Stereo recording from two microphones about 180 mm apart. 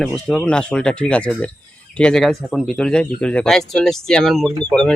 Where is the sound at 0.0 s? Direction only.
5° left (ahead or behind).